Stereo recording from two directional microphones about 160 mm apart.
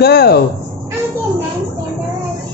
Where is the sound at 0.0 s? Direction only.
75° left (ahead or behind).